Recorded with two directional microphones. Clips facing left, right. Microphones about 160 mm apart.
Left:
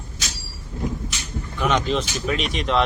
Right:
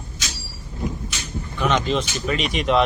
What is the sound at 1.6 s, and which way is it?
Speech, 5° left (ahead or behind).